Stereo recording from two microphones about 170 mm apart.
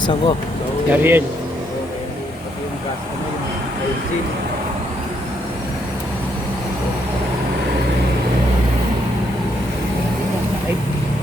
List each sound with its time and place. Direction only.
0.0 s speech: 30° left (ahead or behind)
0.9 s speech: 10° right (ahead or behind)